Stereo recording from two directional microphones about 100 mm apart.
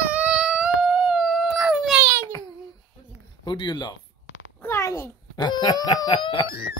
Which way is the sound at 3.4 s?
50° left (ahead or behind).